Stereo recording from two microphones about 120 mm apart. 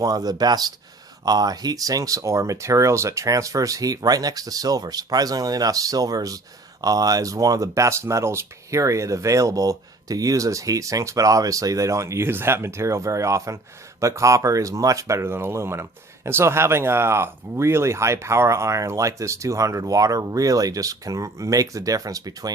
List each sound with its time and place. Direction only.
0.0 s speech: 30° right (ahead or behind)